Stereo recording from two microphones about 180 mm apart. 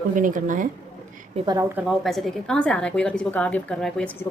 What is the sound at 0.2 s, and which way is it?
Speech, 45° right (ahead or behind).